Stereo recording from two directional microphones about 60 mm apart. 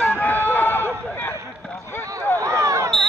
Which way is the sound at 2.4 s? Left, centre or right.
Right.